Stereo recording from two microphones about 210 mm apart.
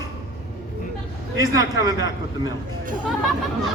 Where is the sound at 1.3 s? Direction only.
15° right (ahead or behind).